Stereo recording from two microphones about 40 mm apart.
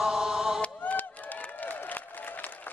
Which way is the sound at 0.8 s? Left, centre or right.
Left.